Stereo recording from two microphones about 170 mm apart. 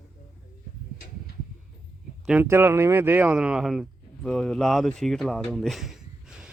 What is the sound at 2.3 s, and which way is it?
Speech, 10° right (ahead or behind).